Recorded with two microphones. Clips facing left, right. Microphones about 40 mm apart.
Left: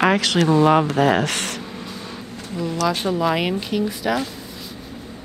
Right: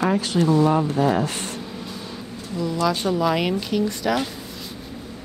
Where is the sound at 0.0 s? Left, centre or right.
Left.